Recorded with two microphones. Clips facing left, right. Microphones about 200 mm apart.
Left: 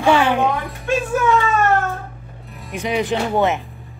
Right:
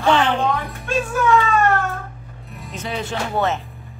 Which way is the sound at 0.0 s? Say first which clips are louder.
Left 2 dB; 10° left (ahead or behind).